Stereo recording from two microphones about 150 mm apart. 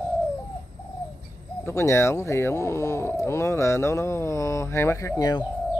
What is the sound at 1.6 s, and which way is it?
Speech, 20° left (ahead or behind).